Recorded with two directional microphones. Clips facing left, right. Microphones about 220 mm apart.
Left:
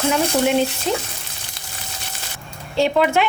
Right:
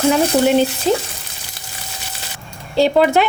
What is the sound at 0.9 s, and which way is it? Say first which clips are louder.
Speech: right 6 dB; 35° right (ahead or behind).